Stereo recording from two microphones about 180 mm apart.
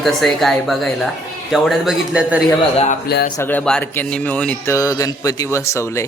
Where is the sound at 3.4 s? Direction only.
10° left (ahead or behind).